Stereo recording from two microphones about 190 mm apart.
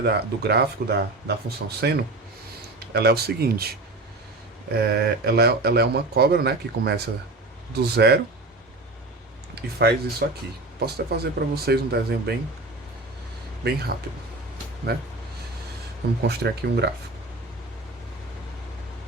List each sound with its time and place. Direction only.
0.0 s speech: 60° right (ahead or behind)
9.6 s speech: 55° right (ahead or behind)
13.7 s speech: 55° right (ahead or behind)
16.4 s speech: 60° right (ahead or behind)